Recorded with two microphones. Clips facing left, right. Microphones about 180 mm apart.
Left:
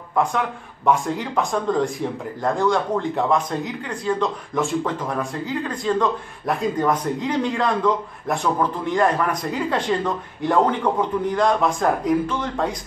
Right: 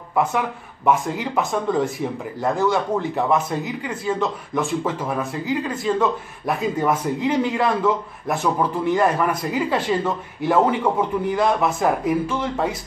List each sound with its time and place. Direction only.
0.1 s speech: 5° right (ahead or behind)